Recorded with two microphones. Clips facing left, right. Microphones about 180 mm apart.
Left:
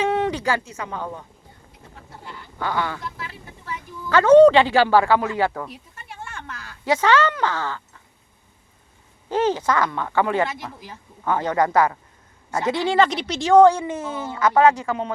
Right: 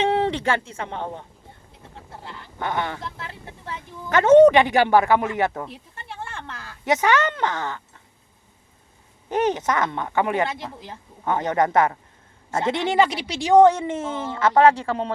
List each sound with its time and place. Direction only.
0.0 s a sound: 30° right (ahead or behind)
2.6 s a woman's voice: 20° right (ahead or behind)
9.3 s a woman's voice: 20° right (ahead or behind)
13.1 s a woman's voice: 10° right (ahead or behind); by 15.1 s 30° right (ahead or behind)